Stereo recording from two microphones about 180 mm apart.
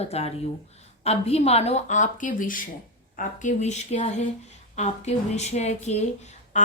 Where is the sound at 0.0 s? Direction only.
35° left (ahead or behind).